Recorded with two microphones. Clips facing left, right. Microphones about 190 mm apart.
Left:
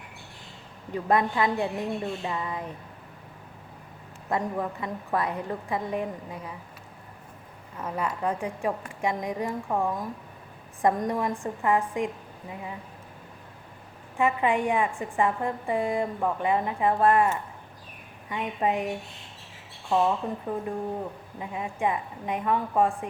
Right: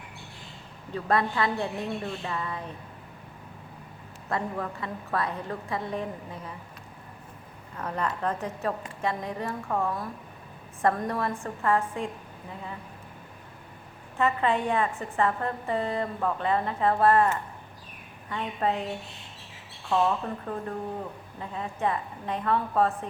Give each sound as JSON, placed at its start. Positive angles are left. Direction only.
{"t": 0.9, "sound": "a woman's voice", "side_deg": 15}
{"t": 4.3, "sound": "a woman's voice", "side_deg": 15}
{"t": 7.8, "sound": "a woman's voice", "side_deg": 10}
{"t": 14.2, "sound": "a woman's voice", "side_deg": 15}